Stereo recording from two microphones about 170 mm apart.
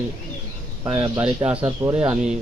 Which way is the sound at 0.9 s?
5° right (ahead or behind).